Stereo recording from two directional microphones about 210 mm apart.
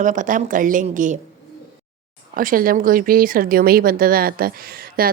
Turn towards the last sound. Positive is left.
turn(degrees=-45)  # may be behind; listen again after turning